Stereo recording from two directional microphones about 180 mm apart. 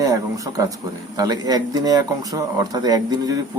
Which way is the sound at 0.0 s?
20° right (ahead or behind).